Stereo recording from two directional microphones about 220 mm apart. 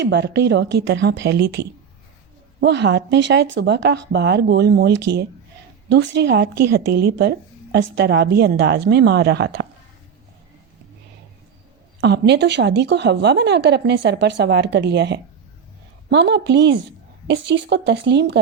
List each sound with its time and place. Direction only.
0.0 s speech: 50° right (ahead or behind)
11.9 s speech: 50° right (ahead or behind)